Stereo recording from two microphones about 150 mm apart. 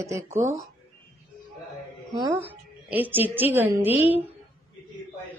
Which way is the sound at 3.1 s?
10° right (ahead or behind).